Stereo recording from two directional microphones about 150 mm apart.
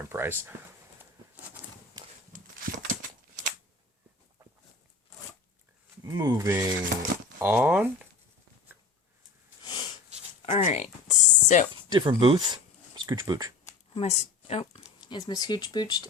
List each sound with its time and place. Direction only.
0.0 s speech: 15° right (ahead or behind)
2.3 s a sound: 60° right (ahead or behind)
6.0 s speech: 25° right (ahead or behind)
9.6 s sniff: 30° left (ahead or behind)
10.4 s speech: 45° left (ahead or behind)
11.1 s a sound: 55° left (ahead or behind)
11.9 s speech: 35° right (ahead or behind)
13.9 s speech: 45° left (ahead or behind)
15.0 s speech: 30° left (ahead or behind)